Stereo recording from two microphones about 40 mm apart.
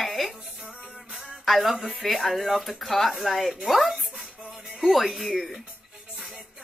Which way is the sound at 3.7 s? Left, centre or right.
Centre.